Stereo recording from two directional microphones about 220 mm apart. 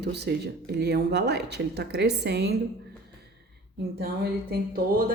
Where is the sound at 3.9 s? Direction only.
45° right (ahead or behind).